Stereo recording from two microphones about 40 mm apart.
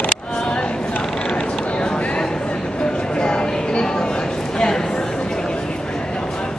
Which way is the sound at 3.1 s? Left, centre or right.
Left.